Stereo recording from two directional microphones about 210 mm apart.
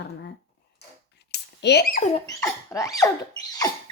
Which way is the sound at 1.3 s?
55° left (ahead or behind).